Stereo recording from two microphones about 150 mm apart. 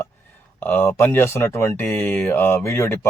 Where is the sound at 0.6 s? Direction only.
15° left (ahead or behind).